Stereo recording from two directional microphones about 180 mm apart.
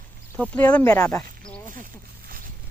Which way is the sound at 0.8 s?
20° left (ahead or behind).